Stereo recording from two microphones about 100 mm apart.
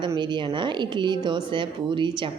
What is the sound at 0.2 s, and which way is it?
A woman's voice, 55° right (ahead or behind).